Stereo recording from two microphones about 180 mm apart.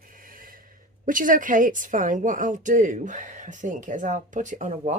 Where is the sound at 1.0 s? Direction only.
50° right (ahead or behind).